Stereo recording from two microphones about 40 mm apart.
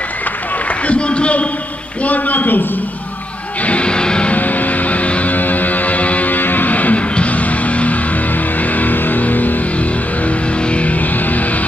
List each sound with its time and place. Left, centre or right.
0.8 s a sound: left
2.0 s a man's voice: left
3.6 s music: left
4.3 s music: left
5.3 s music: left
10.7 s music: left